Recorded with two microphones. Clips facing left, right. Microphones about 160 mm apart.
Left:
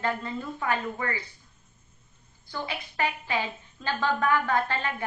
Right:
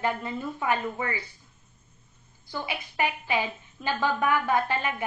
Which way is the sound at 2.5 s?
15° right (ahead or behind).